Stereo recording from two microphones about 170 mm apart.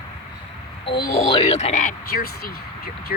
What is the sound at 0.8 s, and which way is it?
Speech, 30° left (ahead or behind).